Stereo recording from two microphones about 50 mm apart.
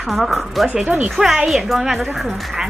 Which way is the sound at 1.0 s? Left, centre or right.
Centre.